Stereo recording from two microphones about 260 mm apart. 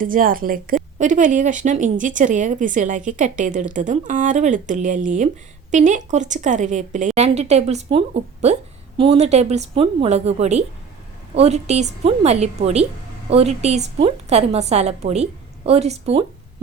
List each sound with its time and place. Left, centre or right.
0.0 s a woman's voice: right